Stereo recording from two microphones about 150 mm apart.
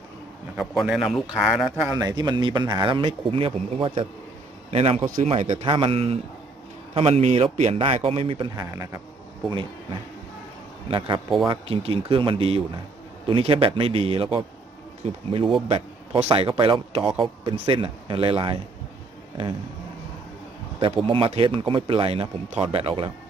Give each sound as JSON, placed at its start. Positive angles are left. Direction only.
{"t": 0.8, "sound": "a man's voice", "side_deg": 0}
{"t": 1.9, "sound": "speech", "side_deg": -25}
{"t": 5.6, "sound": "speech", "side_deg": -35}
{"t": 8.7, "sound": "a man's voice", "side_deg": -15}
{"t": 9.5, "sound": "speech", "side_deg": -35}
{"t": 20.8, "sound": "speech", "side_deg": -35}